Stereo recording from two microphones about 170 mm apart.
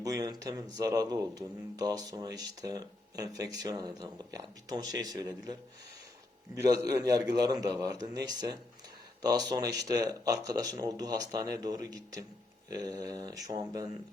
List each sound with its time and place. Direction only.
0.0 s speech: 20° right (ahead or behind)
6.6 s speech: 20° right (ahead or behind)